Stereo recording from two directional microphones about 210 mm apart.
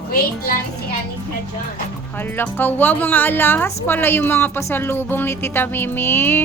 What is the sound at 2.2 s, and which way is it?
A woman's voice, 10° left (ahead or behind).